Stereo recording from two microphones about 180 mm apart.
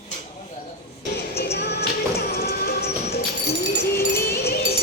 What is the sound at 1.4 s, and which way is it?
Music, 65° left (ahead or behind).